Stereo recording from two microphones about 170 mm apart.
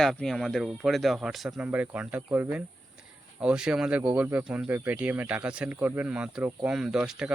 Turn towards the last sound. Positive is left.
turn(degrees=-5)  # may be behind; listen again after turning